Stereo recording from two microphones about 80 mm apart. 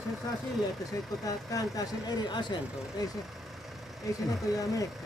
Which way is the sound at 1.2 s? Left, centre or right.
Left.